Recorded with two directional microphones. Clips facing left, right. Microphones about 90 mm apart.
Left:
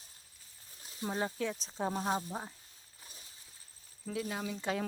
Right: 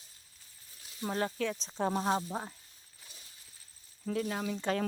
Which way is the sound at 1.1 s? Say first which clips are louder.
Right 2 dB; 15° left (ahead or behind).